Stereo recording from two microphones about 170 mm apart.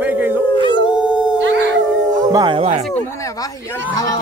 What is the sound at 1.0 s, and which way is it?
Howl, 5° right (ahead or behind).